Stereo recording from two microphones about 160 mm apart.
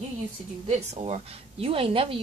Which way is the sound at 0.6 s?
40° right (ahead or behind).